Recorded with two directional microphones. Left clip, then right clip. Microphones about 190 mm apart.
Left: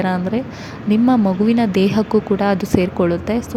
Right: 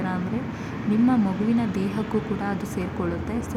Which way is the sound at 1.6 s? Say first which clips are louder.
Left 11 dB; 35° left (ahead or behind).